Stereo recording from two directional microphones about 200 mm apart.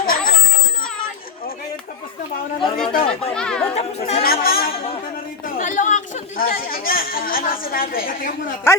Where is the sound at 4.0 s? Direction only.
45° left (ahead or behind).